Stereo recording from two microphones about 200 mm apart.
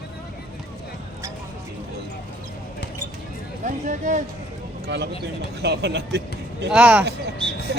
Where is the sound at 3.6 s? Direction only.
40° right (ahead or behind).